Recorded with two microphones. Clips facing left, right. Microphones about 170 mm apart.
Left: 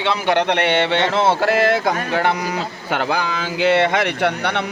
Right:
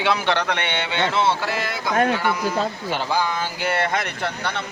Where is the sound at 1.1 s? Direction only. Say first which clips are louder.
Left 5 dB; 45° left (ahead or behind).